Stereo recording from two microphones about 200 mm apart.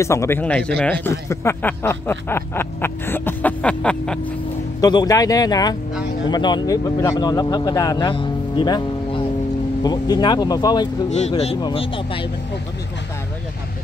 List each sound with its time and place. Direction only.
0.0 s speech: 15° left (ahead or behind)
4.8 s speech: 20° left (ahead or behind)
11.1 s speech: 35° left (ahead or behind)